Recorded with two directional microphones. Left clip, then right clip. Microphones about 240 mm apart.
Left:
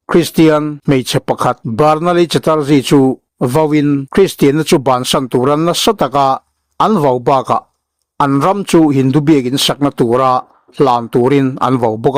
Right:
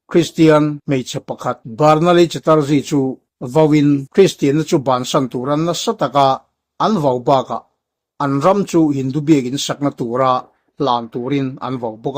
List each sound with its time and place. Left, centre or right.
0.1 s speech: left